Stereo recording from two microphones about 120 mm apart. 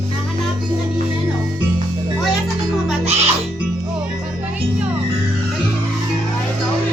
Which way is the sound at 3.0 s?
60° right (ahead or behind).